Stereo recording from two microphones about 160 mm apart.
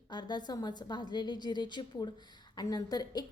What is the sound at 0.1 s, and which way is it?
A woman's voice, 25° left (ahead or behind).